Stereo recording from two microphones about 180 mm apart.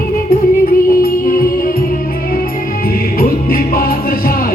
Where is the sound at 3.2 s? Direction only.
55° left (ahead or behind).